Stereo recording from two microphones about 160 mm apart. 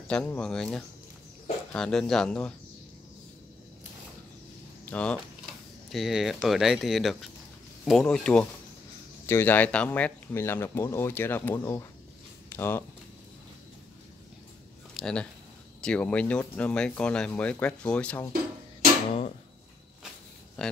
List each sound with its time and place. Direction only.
0.1 s speech: 5° left (ahead or behind)
4.8 s speech: 5° left (ahead or behind)
15.0 s speech: 5° left (ahead or behind)
20.6 s speech: 5° left (ahead or behind)